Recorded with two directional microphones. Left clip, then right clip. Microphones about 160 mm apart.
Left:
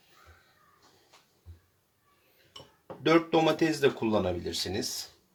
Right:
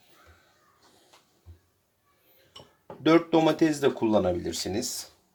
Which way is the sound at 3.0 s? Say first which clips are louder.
Right 3 dB; 40° right (ahead or behind).